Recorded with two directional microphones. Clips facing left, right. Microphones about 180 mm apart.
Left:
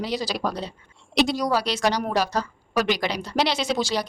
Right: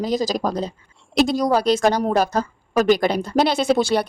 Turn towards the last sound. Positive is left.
turn(degrees=-55)  # may be behind; listen again after turning